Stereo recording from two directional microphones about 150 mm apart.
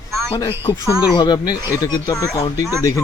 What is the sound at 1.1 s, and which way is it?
Speech, 25° left (ahead or behind).